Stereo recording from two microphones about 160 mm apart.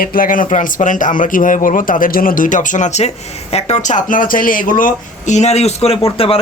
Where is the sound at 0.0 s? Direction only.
60° left (ahead or behind).